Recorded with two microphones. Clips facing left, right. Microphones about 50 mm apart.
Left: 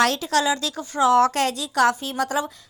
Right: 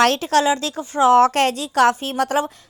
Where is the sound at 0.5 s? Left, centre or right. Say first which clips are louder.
Right 3 dB; right.